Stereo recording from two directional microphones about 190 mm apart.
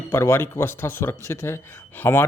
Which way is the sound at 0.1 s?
15° left (ahead or behind).